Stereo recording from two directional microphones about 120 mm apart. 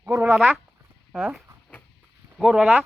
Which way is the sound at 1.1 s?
10° right (ahead or behind).